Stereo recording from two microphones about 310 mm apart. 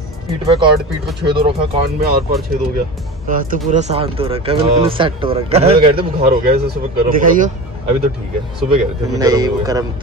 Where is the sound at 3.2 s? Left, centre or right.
Right.